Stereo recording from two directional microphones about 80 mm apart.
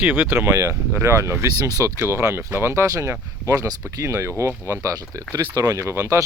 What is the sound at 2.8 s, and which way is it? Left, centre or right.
Speech, right.